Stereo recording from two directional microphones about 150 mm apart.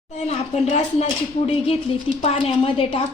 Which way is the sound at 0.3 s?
45° left (ahead or behind).